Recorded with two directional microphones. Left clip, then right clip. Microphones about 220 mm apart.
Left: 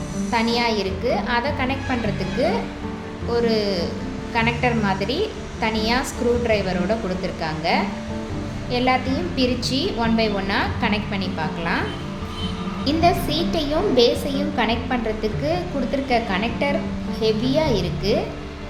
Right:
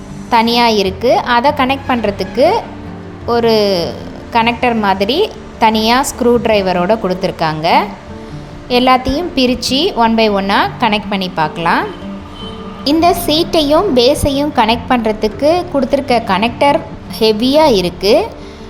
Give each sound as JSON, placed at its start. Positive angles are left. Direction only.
{"t": 0.3, "sound": "a woman's voice", "side_deg": -40}